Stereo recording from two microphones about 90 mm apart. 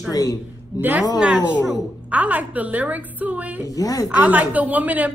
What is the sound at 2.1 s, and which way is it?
A woman's voice, 15° right (ahead or behind).